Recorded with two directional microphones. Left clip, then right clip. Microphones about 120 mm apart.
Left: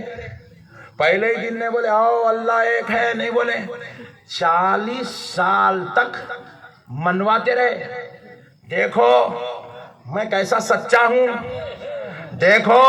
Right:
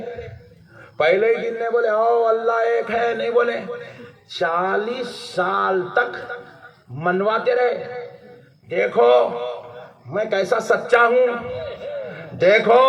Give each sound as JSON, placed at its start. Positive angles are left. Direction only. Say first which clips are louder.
{"t": 0.0, "sound": "throat clearing", "louder": "right 1 dB", "side_deg": -30}
{"t": 0.9, "sound": "a man's voice", "louder": "even", "side_deg": -30}